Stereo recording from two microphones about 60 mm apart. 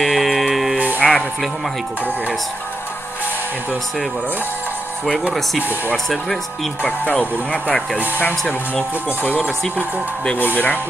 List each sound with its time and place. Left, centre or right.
0.0 s music: centre
0.9 s music: centre
6.0 s speech: centre
6.8 s speech: left
8.2 s speech: left